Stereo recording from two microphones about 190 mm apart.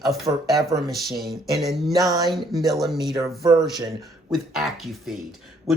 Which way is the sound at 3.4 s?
20° right (ahead or behind).